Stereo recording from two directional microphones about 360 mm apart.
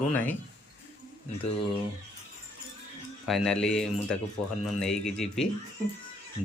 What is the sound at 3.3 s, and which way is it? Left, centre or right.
A man's voice, centre.